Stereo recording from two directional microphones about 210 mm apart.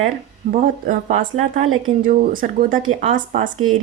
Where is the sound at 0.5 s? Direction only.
35° right (ahead or behind).